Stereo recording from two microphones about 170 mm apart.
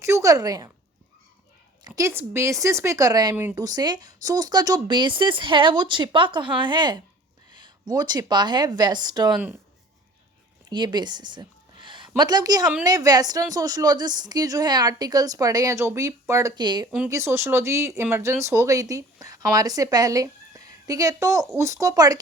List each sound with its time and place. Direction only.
0.0 s speech: 20° right (ahead or behind)
2.0 s speech: 15° right (ahead or behind)
9.3 s speech: 10° right (ahead or behind)
10.7 s a woman's voice: 25° right (ahead or behind)